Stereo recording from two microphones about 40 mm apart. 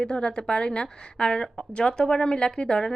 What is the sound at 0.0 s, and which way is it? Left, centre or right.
A woman's voice, left.